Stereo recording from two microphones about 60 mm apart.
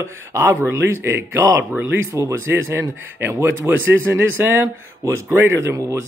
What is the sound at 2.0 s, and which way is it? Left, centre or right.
Speech, right.